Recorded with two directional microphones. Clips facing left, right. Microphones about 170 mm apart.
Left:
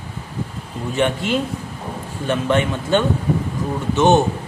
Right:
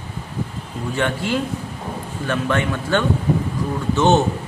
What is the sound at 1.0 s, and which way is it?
A man's voice, 20° left (ahead or behind).